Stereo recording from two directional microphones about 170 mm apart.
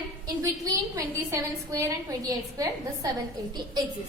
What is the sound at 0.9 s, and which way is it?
A woman's voice, 20° right (ahead or behind).